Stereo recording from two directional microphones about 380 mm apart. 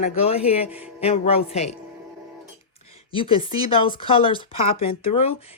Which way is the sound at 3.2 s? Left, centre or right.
Centre.